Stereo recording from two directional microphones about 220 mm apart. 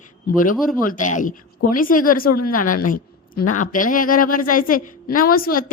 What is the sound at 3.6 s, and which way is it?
A woman's voice, 35° left (ahead or behind).